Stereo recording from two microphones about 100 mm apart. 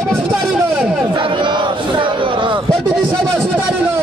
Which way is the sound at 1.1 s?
55° right (ahead or behind).